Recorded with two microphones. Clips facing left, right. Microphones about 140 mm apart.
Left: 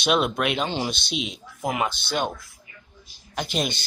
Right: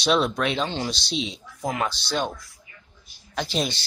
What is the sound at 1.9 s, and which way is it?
Speech, 50° left (ahead or behind).